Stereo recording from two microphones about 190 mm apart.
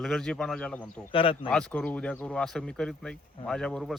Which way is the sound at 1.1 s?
25° left (ahead or behind).